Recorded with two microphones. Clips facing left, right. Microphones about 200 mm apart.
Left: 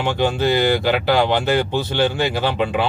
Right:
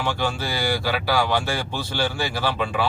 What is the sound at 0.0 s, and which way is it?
Speech, 20° left (ahead or behind).